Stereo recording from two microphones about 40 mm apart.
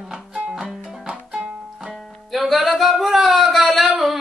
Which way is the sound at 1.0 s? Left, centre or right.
Right.